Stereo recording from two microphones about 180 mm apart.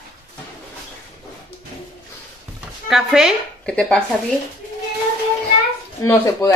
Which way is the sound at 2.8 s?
Centre (ahead or behind).